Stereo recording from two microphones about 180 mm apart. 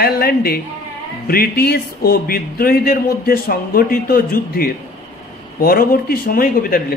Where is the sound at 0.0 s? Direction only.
60° left (ahead or behind).